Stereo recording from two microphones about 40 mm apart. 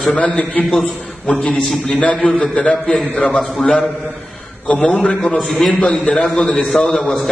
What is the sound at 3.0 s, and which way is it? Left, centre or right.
Speech, left.